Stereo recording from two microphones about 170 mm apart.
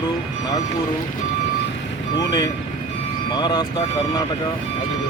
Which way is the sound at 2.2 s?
25° left (ahead or behind).